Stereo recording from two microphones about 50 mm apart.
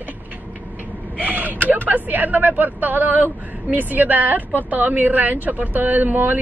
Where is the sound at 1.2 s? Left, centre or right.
Right.